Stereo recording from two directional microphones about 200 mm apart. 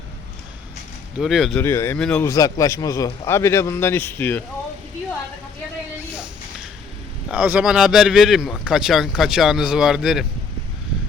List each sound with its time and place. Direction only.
1.2 s speech: centre (ahead or behind)
1.6 s a man's voice: 15° left (ahead or behind)
2.2 s a man's voice: 15° left (ahead or behind)
7.3 s speech: 10° right (ahead or behind)